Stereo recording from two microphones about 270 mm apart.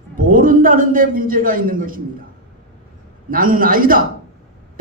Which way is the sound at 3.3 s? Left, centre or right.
Right.